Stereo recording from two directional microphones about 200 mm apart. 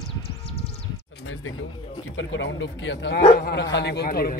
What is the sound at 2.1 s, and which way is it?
Speech, 70° left (ahead or behind).